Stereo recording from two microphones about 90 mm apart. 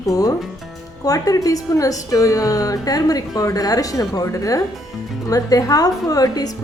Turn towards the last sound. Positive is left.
turn(degrees=45)  # may be behind; listen again after turning